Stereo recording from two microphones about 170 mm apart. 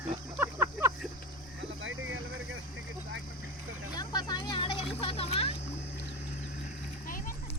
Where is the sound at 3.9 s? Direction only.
25° left (ahead or behind).